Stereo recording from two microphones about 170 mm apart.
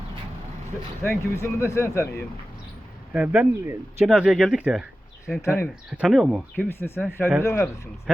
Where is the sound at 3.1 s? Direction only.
10° right (ahead or behind).